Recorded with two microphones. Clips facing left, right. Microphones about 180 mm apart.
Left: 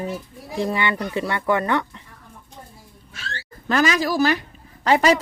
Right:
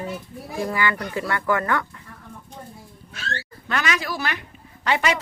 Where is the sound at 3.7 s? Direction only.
35° left (ahead or behind).